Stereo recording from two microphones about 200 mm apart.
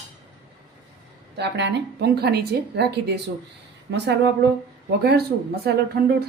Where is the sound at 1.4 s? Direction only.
60° right (ahead or behind).